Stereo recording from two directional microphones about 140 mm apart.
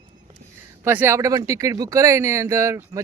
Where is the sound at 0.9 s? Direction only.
15° right (ahead or behind).